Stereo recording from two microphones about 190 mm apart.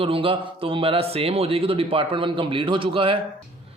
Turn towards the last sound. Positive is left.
turn(degrees=-30)  # may be behind; listen again after turning